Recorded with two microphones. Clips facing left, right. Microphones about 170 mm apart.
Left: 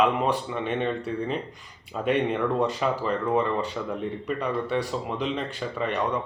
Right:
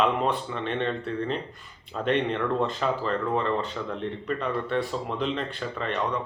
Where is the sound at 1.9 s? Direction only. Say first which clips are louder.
Left 1 dB; 10° left (ahead or behind).